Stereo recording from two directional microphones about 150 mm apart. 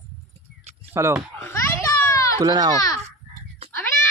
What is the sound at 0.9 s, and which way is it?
Speech, 15° right (ahead or behind).